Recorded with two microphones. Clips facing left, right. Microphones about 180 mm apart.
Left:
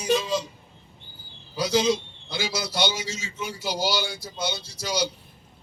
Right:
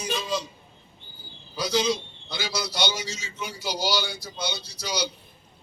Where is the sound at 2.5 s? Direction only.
50° left (ahead or behind).